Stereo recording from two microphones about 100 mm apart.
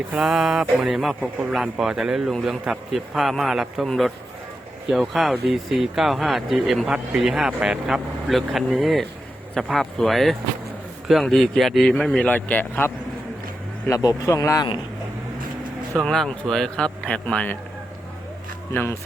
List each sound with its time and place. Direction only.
0.1 s a sound: 5° right (ahead or behind)
1.5 s speech: 5° right (ahead or behind)
12.3 s speech: 15° left (ahead or behind)
13.9 s speech: 35° left (ahead or behind)
16.0 s speech: 5° left (ahead or behind)
18.7 s speech: 20° left (ahead or behind)